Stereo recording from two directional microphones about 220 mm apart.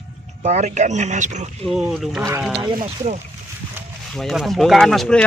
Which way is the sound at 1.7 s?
Centre (ahead or behind).